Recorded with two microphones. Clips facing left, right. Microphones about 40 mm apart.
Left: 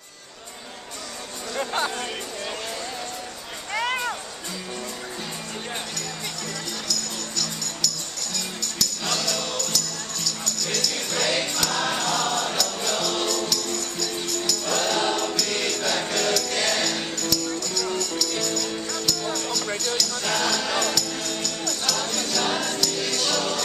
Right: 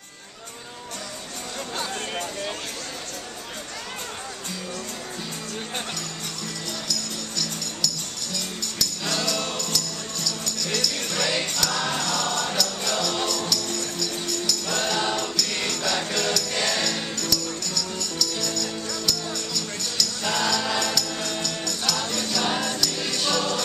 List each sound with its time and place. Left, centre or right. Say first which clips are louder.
3.7 s music: left 14 dB; left
9.1 s music: right 1 dB; centre